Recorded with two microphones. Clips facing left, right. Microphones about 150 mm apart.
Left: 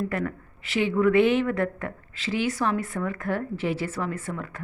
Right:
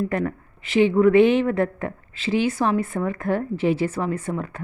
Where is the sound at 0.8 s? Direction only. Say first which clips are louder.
Right 5 dB; 25° right (ahead or behind).